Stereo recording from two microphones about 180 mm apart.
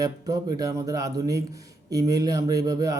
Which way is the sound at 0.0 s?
20° right (ahead or behind).